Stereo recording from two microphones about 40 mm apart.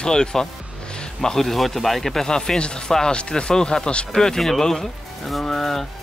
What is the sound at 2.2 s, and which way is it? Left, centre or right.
Speech, centre.